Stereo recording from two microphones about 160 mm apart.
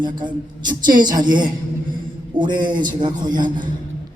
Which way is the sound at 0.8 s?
55° right (ahead or behind).